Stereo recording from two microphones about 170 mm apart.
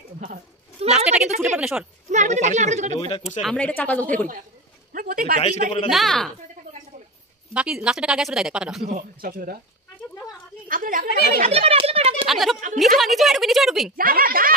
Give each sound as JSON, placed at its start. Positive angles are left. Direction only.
{"t": 0.9, "sound": "a sound", "side_deg": -5}
{"t": 1.6, "sound": "a woman's voice", "side_deg": -5}
{"t": 2.0, "sound": "a woman's voice", "side_deg": -45}
{"t": 2.9, "sound": "speech", "side_deg": 30}
{"t": 3.4, "sound": "speech", "side_deg": 10}
{"t": 4.9, "sound": "speech", "side_deg": -55}
{"t": 5.4, "sound": "speech", "side_deg": 40}
{"t": 5.9, "sound": "speech", "side_deg": 0}
{"t": 7.5, "sound": "speech", "side_deg": -5}
{"t": 9.2, "sound": "speech", "side_deg": -60}
{"t": 10.7, "sound": "chatter", "side_deg": -55}
{"t": 11.4, "sound": "speech", "side_deg": -35}
{"t": 12.3, "sound": "a woman's voice", "side_deg": 0}
{"t": 13.9, "sound": "speech", "side_deg": -55}